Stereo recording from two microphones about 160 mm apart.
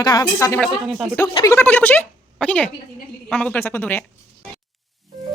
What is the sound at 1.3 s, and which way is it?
A woman's voice, 15° left (ahead or behind).